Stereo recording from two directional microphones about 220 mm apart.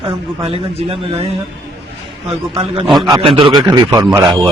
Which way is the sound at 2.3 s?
25° right (ahead or behind).